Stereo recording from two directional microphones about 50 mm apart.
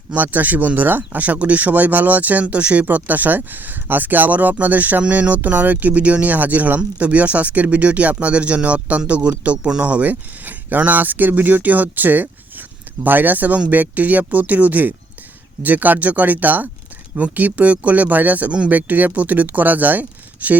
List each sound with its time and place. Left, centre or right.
0.1 s speech: right